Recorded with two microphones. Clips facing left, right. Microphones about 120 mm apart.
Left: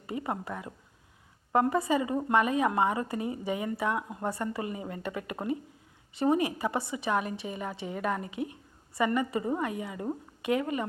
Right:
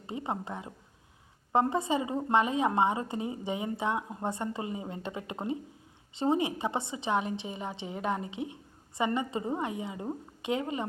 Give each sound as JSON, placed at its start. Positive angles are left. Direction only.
{"t": 0.1, "sound": "a woman's voice", "side_deg": -20}